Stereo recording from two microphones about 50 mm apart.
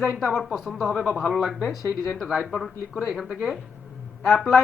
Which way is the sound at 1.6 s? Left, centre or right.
Centre.